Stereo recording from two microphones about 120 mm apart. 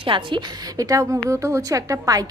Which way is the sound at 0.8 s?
30° right (ahead or behind).